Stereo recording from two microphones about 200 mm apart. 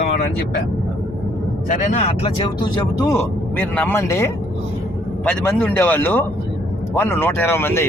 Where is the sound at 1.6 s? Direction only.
35° left (ahead or behind).